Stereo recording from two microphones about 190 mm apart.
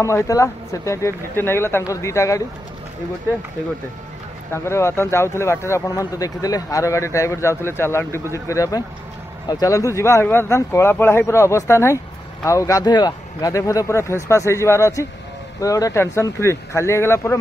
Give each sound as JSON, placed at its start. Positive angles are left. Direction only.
{"t": 0.0, "sound": "speech", "side_deg": 15}
{"t": 4.5, "sound": "speech", "side_deg": 15}